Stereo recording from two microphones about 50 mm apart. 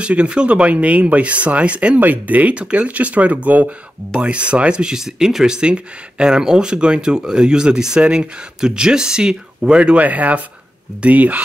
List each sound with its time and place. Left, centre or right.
0.0 s speech: right
2.0 s speech: right